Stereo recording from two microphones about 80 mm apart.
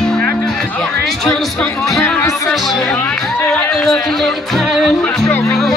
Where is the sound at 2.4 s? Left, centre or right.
Centre.